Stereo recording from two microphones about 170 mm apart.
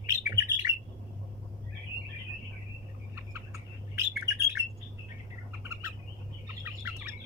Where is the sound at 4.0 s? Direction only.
15° right (ahead or behind).